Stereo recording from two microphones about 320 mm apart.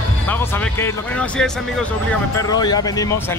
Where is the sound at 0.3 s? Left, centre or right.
Centre.